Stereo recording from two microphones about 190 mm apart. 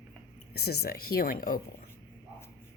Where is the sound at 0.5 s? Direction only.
55° left (ahead or behind).